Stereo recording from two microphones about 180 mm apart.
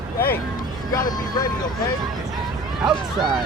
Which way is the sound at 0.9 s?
20° left (ahead or behind).